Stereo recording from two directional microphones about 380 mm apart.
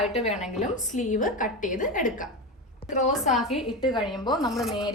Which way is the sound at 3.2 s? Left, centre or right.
Centre.